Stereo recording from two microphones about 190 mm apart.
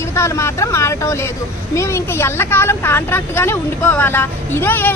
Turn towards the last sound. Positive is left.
turn(degrees=10)  # may be behind; listen again after turning